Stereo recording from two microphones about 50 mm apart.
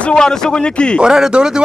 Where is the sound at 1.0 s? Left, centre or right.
Centre.